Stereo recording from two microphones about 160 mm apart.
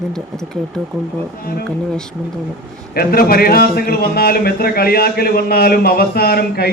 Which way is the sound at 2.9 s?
70° left (ahead or behind).